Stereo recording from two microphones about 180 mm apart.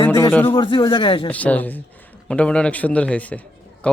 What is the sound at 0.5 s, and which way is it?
Speech, 30° left (ahead or behind).